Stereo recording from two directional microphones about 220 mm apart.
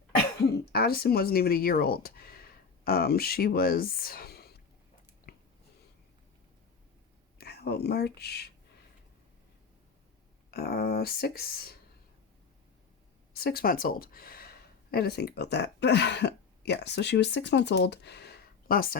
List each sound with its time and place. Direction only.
0.7 s speech: 45° left (ahead or behind)
5.3 s a sound: 45° left (ahead or behind)
7.3 s speech: 45° left (ahead or behind)
10.5 s speech: 45° left (ahead or behind)
13.3 s speech: 45° left (ahead or behind)